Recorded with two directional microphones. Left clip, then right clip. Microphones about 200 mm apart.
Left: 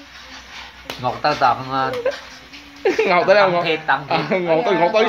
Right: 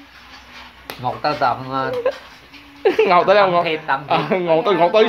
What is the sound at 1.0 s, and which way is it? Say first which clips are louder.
A woman's voice: left 2 dB; 15° right (ahead or behind).